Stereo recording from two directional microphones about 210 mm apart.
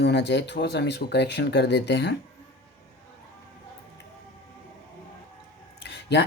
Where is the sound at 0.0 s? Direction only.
55° left (ahead or behind).